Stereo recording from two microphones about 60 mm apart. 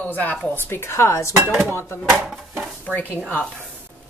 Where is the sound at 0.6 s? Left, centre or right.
Left.